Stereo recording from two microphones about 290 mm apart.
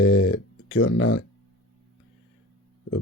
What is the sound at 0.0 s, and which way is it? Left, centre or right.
Speech, left.